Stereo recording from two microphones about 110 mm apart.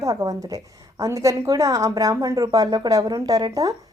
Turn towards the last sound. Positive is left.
turn(degrees=-30)  # may be behind; listen again after turning